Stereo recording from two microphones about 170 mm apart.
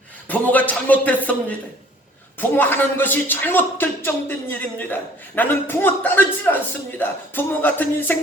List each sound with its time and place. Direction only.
0.3 s speech: 10° left (ahead or behind)